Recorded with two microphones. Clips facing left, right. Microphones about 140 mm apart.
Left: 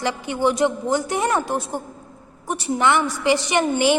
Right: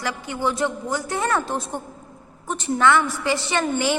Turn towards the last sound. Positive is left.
turn(degrees=20)  # may be behind; listen again after turning